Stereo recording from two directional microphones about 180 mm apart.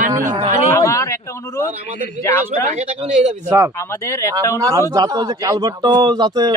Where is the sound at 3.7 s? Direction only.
15° left (ahead or behind).